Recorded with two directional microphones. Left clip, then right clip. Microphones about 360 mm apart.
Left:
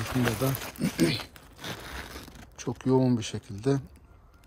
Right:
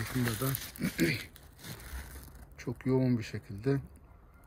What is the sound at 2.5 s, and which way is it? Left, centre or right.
Speech, centre.